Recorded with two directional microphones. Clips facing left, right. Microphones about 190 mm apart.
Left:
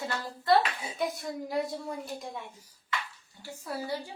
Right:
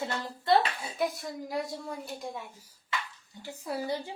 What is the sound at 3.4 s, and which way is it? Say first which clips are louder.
Speech: right 2 dB; 20° right (ahead or behind).